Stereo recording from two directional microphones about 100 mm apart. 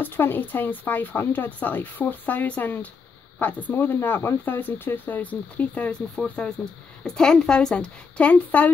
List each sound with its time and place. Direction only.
0.0 s speech: 20° left (ahead or behind)